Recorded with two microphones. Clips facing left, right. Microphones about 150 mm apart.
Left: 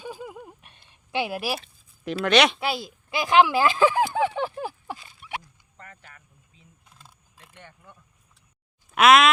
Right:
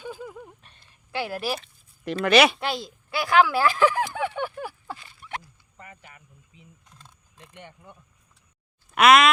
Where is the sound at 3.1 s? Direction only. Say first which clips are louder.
Left 1 dB; 20° left (ahead or behind).